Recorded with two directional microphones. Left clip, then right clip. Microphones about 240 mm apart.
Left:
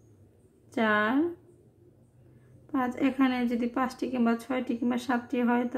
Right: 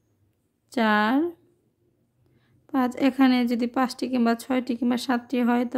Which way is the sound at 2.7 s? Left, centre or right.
Right.